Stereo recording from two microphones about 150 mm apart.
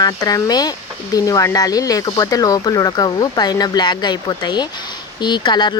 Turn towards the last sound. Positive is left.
turn(degrees=30)  # may be behind; listen again after turning